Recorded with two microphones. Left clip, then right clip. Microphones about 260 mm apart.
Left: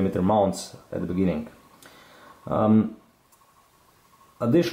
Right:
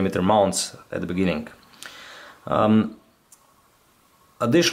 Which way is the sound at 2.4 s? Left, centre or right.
Centre.